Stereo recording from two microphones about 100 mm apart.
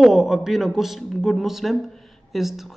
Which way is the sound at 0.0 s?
5° right (ahead or behind).